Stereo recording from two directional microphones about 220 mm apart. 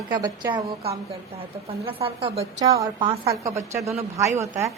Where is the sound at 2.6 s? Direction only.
15° right (ahead or behind).